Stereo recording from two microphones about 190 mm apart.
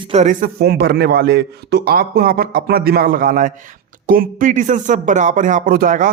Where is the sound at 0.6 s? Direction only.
55° right (ahead or behind).